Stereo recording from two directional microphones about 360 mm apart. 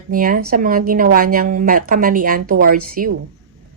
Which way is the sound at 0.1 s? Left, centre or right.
Right.